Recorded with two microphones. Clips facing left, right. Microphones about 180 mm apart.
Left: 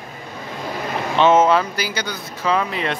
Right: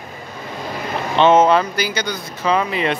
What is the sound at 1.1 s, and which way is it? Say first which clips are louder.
Speech: right 2 dB; 5° left (ahead or behind).